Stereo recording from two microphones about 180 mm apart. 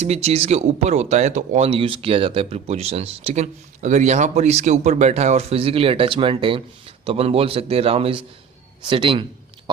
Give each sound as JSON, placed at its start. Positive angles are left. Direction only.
{"t": 0.0, "sound": "a man's voice", "side_deg": -35}